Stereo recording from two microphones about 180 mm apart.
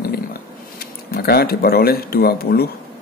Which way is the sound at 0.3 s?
55° left (ahead or behind).